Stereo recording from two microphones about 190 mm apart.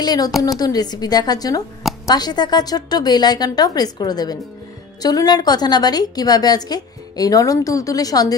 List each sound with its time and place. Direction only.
0.0 s a woman's voice: 20° left (ahead or behind)